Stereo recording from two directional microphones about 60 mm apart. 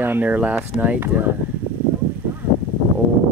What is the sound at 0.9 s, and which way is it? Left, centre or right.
Speech, right.